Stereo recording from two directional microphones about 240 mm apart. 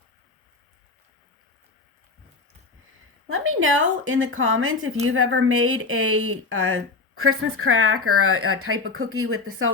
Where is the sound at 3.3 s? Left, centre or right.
Right.